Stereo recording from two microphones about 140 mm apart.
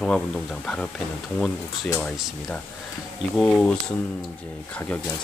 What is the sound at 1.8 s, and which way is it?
Speech, 15° left (ahead or behind).